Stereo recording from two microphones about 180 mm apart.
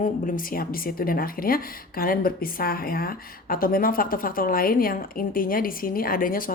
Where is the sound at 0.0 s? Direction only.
50° left (ahead or behind).